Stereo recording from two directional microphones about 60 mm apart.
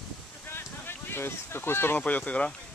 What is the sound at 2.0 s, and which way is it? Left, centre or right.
Speech, left.